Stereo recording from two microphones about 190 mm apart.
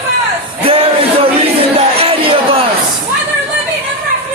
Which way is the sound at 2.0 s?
30° right (ahead or behind).